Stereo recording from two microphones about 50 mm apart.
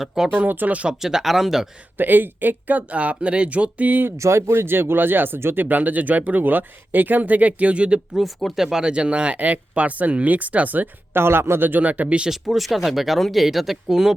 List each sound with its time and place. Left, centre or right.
0.0 s speech: centre
0.3 s speech: right
0.9 s speech: centre
2.0 s speech: right
4.2 s speech: right
5.6 s speech: right
8.5 s speech: centre
8.9 s speech: right
11.1 s speech: right
12.3 s speech: centre